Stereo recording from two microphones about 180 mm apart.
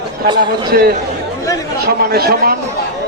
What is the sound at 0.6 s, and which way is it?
Speech, 60° right (ahead or behind).